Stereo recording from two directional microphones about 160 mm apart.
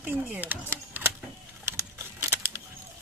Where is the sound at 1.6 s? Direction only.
15° right (ahead or behind).